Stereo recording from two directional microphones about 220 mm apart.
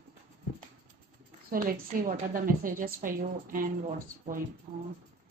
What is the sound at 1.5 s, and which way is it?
A woman's voice, 40° right (ahead or behind).